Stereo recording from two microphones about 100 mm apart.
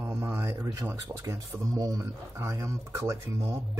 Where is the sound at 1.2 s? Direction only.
30° right (ahead or behind).